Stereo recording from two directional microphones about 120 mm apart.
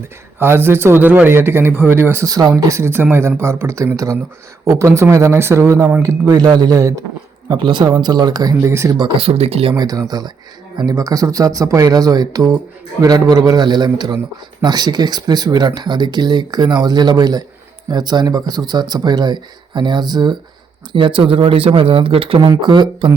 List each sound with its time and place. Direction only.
0.3 s a man's voice: 20° right (ahead or behind)
2.3 s a man's voice: 30° right (ahead or behind)
7.4 s speech: 40° right (ahead or behind); by 9.0 s 25° right (ahead or behind)
9.0 s speech: 40° right (ahead or behind)
9.2 s speech: 60° right (ahead or behind)
9.7 s a man's voice: 30° right (ahead or behind); by 22.4 s 50° right (ahead or behind)
22.4 s speech: 40° right (ahead or behind)